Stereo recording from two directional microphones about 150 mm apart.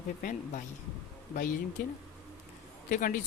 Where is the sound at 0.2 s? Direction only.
65° left (ahead or behind).